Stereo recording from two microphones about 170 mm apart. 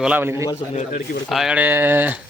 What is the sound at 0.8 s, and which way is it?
Speech, 55° left (ahead or behind).